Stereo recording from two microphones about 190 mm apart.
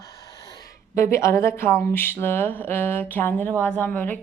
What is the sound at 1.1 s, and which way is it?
A woman's voice, 15° left (ahead or behind).